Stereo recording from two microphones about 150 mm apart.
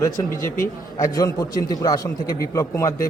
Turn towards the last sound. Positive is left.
turn(degrees=20)  # may be behind; listen again after turning